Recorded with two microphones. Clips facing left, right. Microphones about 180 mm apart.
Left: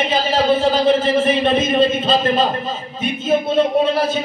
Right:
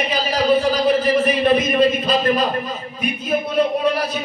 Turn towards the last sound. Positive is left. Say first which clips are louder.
# left 3 dB
turn(degrees=25)  # may be behind; listen again after turning